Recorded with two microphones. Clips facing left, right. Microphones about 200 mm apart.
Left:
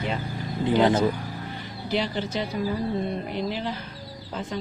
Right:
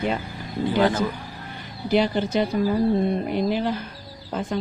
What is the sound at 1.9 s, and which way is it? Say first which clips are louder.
Speech: right 6 dB; 50° right (ahead or behind).